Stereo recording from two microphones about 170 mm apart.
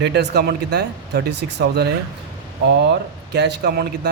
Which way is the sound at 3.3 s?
80° right.